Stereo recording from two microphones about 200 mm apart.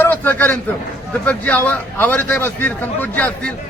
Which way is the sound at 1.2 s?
10° left (ahead or behind).